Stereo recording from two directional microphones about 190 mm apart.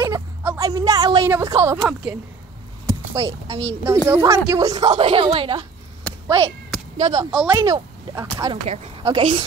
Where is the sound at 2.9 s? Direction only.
15° right (ahead or behind).